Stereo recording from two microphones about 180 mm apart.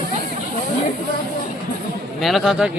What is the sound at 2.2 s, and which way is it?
Speech, centre (ahead or behind).